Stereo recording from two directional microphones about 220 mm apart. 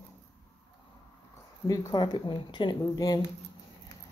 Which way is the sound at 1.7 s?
15° left (ahead or behind).